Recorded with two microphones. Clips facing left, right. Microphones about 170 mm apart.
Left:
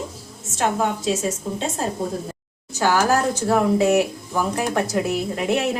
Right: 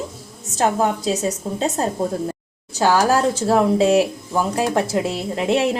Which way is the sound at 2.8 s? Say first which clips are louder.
Right 2 dB; 30° right (ahead or behind).